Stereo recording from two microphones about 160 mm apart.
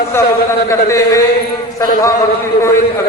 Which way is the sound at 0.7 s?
20° left (ahead or behind).